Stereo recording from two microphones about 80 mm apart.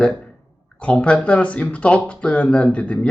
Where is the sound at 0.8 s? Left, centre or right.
Centre.